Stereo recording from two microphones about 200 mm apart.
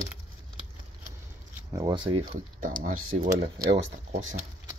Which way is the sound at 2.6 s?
40° right (ahead or behind).